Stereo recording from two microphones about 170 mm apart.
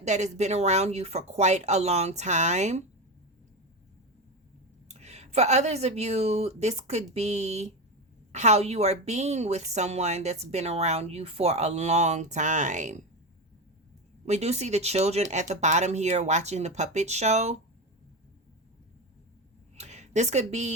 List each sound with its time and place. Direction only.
0.0 s a woman's voice: 40° right (ahead or behind)
4.9 s a woman's voice: 40° right (ahead or behind)
14.3 s a woman's voice: 40° right (ahead or behind)
19.7 s speech: 40° right (ahead or behind)